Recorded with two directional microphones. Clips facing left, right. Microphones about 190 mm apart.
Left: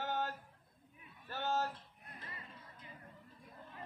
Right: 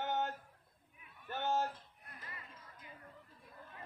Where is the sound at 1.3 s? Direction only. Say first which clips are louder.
Right 1 dB; 20° right (ahead or behind).